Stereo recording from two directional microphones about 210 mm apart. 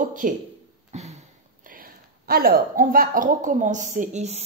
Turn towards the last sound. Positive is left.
turn(degrees=-35)  # may be behind; listen again after turning